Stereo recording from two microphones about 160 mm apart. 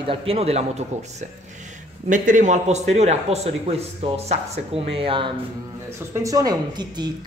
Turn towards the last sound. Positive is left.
turn(degrees=-25)  # may be behind; listen again after turning